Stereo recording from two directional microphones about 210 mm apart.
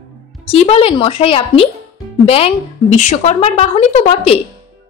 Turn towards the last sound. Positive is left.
turn(degrees=30)  # may be behind; listen again after turning